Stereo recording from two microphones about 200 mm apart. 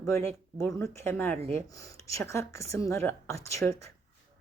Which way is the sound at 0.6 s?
10° left (ahead or behind).